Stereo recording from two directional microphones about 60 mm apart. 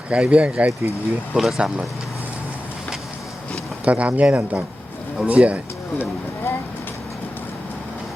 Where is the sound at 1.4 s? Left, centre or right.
Centre.